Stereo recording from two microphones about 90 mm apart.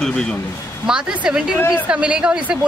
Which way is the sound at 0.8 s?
10° right (ahead or behind).